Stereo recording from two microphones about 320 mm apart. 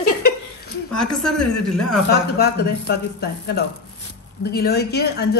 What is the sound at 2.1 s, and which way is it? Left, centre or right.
Speech, left.